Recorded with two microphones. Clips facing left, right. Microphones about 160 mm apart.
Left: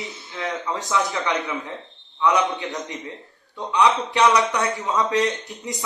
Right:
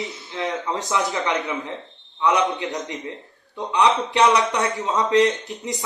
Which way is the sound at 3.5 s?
20° right (ahead or behind).